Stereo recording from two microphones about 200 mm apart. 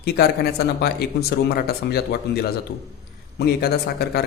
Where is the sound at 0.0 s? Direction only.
50° left (ahead or behind).